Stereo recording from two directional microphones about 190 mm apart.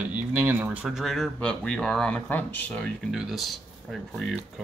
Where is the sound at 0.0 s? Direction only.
10° right (ahead or behind).